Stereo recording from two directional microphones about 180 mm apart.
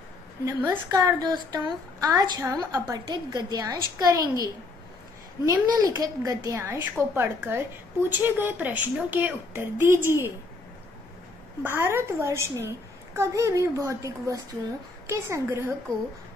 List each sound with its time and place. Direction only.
0.5 s a woman's voice: 20° right (ahead or behind)
5.4 s a child's voice: 15° right (ahead or behind)
11.6 s a child's voice: 15° right (ahead or behind)